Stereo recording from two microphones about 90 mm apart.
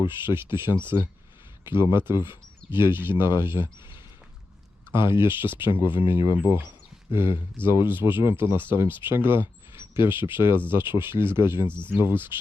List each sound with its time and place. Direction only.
0.0 s speech: 25° right (ahead or behind)
4.9 s speech: 25° right (ahead or behind)
6.0 s speech: 60° left (ahead or behind)
6.3 s speech: 20° right (ahead or behind)
11.7 s speech: 15° left (ahead or behind)
11.9 s speech: 25° right (ahead or behind)